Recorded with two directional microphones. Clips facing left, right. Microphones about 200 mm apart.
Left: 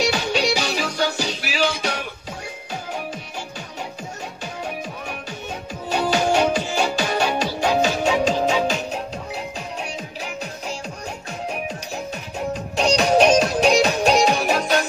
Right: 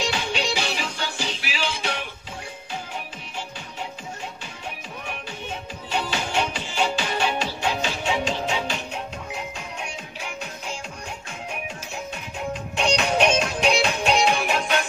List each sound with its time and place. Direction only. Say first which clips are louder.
0.0 s music: left 5 dB; 40° left (ahead or behind)
5.9 s music: left 8 dB; 40° left (ahead or behind)
12.4 s music: left 4 dB; 40° left (ahead or behind)